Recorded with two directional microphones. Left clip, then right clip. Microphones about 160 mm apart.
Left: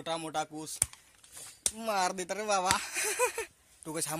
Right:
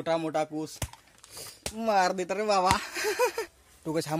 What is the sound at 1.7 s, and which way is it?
Speech, 25° left (ahead or behind).